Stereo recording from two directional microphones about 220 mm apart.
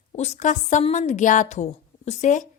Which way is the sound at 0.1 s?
30° left (ahead or behind).